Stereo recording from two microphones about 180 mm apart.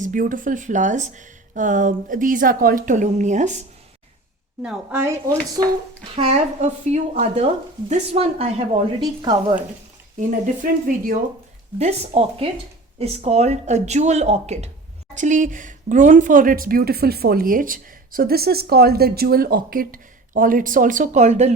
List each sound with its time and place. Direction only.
0.0 s speech: 45° right (ahead or behind)
4.6 s a woman's voice: 10° right (ahead or behind)
6.1 s speech: 35° right (ahead or behind)
10.2 s speech: 45° right (ahead or behind)
11.8 s speech: 35° right (ahead or behind)